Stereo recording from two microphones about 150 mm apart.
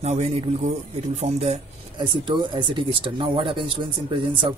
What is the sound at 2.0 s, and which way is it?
Speech, 30° right (ahead or behind).